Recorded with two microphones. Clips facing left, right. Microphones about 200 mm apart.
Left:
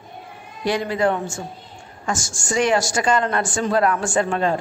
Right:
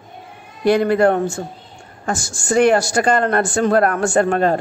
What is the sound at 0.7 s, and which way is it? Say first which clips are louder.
Speech: right 7 dB; 60° right (ahead or behind).